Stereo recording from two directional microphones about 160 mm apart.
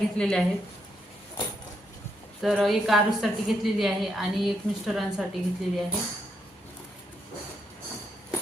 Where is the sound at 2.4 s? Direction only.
Centre (ahead or behind).